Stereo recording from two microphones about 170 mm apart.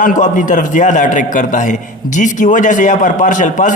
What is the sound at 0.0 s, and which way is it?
A man's voice, 50° left (ahead or behind).